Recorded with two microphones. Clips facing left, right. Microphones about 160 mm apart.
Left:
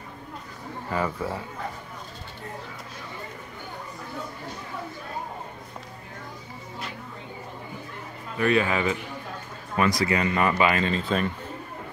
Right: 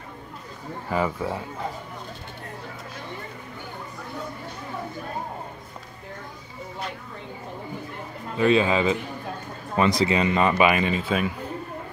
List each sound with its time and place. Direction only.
0.8 s speech: 15° right (ahead or behind)
8.4 s speech: 20° right (ahead or behind); by 11.3 s 5° right (ahead or behind)